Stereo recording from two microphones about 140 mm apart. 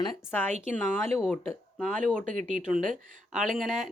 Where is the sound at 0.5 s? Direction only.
50° right (ahead or behind).